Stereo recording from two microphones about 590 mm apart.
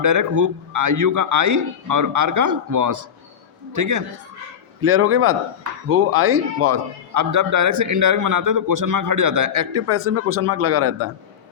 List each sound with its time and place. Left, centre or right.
0.0 s a man's voice: right